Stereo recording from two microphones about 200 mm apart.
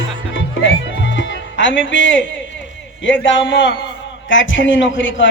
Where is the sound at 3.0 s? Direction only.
70° left (ahead or behind).